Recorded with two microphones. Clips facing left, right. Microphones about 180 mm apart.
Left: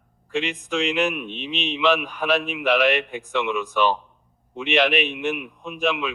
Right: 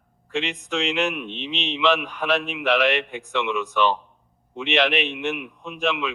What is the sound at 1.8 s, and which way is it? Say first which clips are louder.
Speech: left 1 dB; 5° left (ahead or behind).